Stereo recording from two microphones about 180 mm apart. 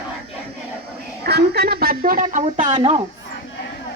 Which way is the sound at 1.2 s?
65° right (ahead or behind).